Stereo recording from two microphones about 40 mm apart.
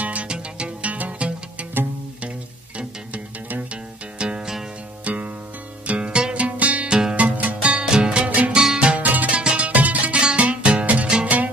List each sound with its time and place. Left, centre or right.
0.0 s music: right
4.2 s music: right
5.0 s music: right
6.9 s music: centre
7.2 s music: right
7.8 s music: right
8.9 s music: right
9.4 s music: right
9.7 s music: right
10.1 s music: right
11.2 s music: right